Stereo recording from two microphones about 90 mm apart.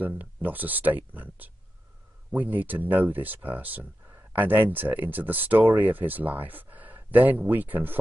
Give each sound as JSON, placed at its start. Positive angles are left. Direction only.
{"t": 0.0, "sound": "speech", "side_deg": -20}